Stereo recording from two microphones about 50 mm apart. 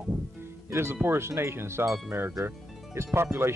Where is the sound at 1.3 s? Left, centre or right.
Right.